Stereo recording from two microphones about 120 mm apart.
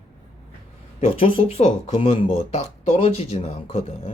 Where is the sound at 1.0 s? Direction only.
50° left (ahead or behind).